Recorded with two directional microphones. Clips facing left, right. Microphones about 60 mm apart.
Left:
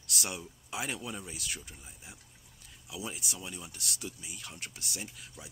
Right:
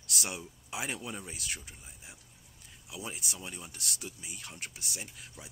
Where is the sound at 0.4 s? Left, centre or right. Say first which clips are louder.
Even; right.